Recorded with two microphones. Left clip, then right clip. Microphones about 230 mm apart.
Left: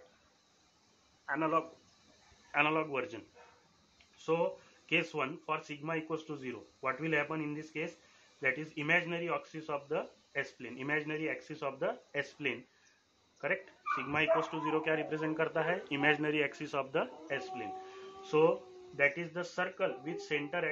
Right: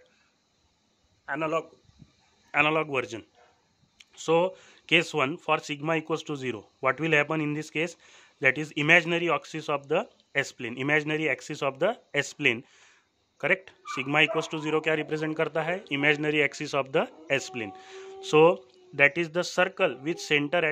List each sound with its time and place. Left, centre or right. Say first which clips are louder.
1.2 s speech: right 4 dB; right